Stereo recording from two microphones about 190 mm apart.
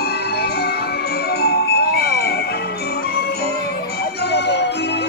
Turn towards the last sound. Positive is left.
turn(degrees=65)  # may be behind; listen again after turning